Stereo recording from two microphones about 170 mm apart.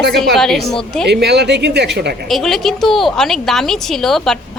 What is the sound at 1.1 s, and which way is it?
A woman's voice, 80° right.